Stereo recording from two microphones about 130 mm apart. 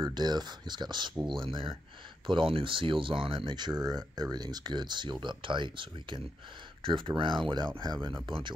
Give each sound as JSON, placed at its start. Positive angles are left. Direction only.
{"t": 0.0, "sound": "speech", "side_deg": -35}